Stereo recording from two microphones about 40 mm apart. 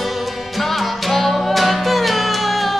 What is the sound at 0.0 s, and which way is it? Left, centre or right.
Music, centre.